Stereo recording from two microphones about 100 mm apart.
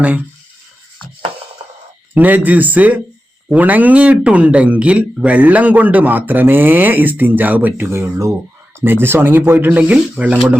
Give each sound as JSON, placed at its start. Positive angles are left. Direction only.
{"t": 2.1, "sound": "speech", "side_deg": -15}